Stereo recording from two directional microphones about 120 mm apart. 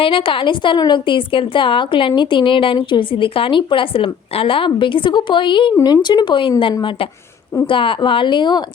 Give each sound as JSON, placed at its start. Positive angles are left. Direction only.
{"t": 0.0, "sound": "a woman's voice", "side_deg": 45}
{"t": 7.7, "sound": "a woman's voice", "side_deg": 45}